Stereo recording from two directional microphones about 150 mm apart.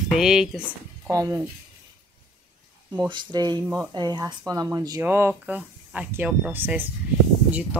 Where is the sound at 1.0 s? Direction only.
20° right (ahead or behind).